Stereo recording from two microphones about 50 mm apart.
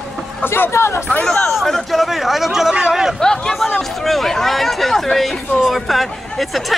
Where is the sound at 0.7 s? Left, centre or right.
Left.